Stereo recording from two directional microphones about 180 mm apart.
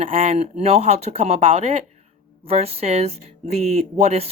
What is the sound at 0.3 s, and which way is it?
Speech, 35° right (ahead or behind).